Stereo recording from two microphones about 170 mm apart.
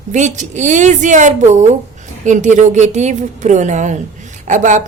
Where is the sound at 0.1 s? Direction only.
45° right (ahead or behind).